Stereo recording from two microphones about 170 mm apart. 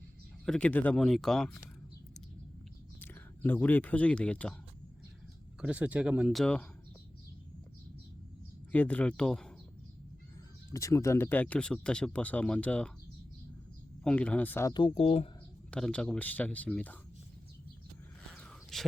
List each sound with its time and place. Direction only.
0.4 s speech: 5° left (ahead or behind)
3.0 s speech: 10° left (ahead or behind)
5.5 s speech: 5° right (ahead or behind)
8.7 s speech: 10° left (ahead or behind)
10.7 s speech: 20° left (ahead or behind)
14.0 s speech: 5° left (ahead or behind)
14.7 s speech: 30° left (ahead or behind)
15.7 s speech: 5° left (ahead or behind)
18.3 s a sound: 5° left (ahead or behind)